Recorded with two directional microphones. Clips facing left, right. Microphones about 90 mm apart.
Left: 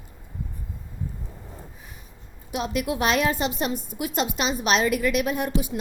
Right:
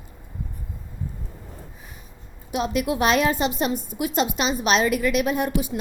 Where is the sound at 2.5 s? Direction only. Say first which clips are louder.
Right 3 dB; 25° right (ahead or behind).